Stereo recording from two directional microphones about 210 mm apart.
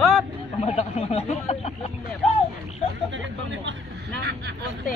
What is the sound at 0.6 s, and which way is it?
Speech, 30° left (ahead or behind).